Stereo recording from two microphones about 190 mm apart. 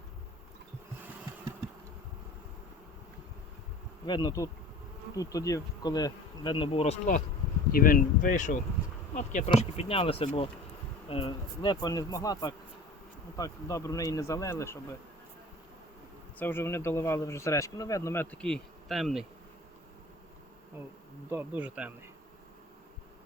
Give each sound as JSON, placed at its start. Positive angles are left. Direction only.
{"t": 4.0, "sound": "bee", "side_deg": 20}
{"t": 7.7, "sound": "speech", "side_deg": 50}
{"t": 11.1, "sound": "bee", "side_deg": 30}
{"t": 13.3, "sound": "speech", "side_deg": 15}
{"t": 16.4, "sound": "speech", "side_deg": 10}
{"t": 21.2, "sound": "bee", "side_deg": -10}